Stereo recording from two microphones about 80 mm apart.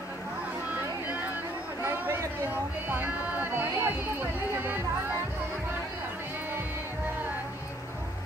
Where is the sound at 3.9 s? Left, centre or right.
Right.